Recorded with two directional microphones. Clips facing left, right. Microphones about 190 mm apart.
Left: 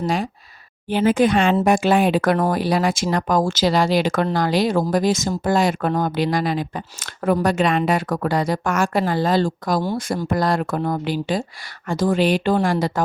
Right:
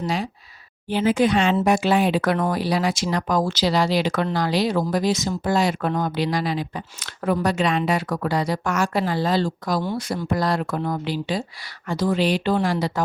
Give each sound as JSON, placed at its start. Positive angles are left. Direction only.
{"t": 0.0, "sound": "speech", "side_deg": 50}